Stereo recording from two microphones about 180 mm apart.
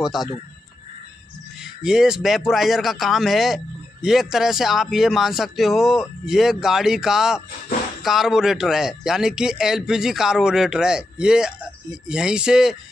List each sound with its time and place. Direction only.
0.0 s speech: centre (ahead or behind)
1.6 s speech: 5° right (ahead or behind)